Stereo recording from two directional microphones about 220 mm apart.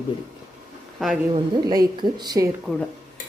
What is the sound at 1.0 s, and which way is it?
Speech, centre (ahead or behind).